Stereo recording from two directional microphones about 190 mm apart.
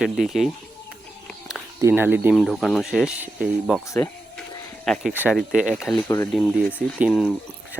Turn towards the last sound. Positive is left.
turn(degrees=5)  # may be behind; listen again after turning